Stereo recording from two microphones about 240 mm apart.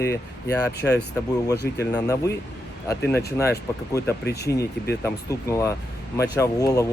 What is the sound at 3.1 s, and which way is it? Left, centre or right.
Speech, centre.